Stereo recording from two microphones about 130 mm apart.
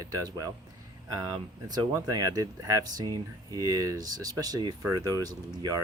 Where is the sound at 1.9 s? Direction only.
25° right (ahead or behind).